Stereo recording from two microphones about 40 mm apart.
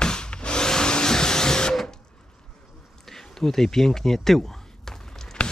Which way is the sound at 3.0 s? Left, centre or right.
Centre.